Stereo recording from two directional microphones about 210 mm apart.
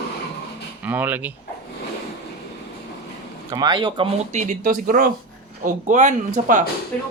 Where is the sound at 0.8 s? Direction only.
10° right (ahead or behind).